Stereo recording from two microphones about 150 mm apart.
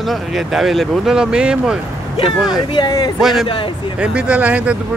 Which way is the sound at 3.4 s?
35° left (ahead or behind).